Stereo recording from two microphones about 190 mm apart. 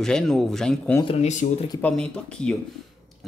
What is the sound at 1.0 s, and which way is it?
Speech, 40° left (ahead or behind).